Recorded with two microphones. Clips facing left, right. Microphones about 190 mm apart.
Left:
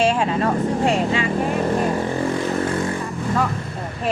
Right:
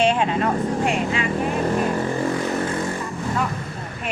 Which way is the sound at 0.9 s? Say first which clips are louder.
Left 3 dB; 30° left (ahead or behind).